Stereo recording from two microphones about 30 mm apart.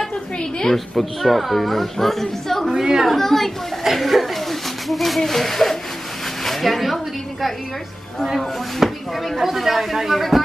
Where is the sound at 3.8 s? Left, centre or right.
Centre.